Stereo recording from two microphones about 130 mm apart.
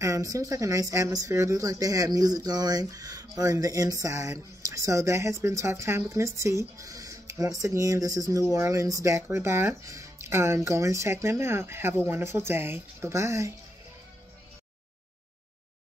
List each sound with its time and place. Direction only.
0.0 s speech: 25° right (ahead or behind)